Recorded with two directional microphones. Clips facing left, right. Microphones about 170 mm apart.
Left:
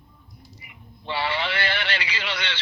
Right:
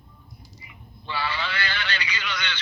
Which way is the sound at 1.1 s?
25° left (ahead or behind).